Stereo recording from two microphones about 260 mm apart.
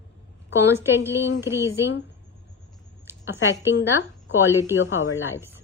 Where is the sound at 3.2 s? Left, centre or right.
Centre.